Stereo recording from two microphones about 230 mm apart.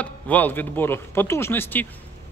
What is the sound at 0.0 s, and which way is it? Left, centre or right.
A man's voice, centre.